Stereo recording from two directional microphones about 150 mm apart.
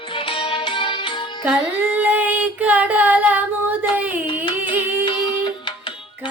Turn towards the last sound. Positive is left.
turn(degrees=30)  # may be behind; listen again after turning